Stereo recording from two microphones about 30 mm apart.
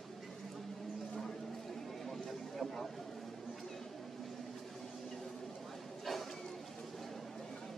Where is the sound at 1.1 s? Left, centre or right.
Centre.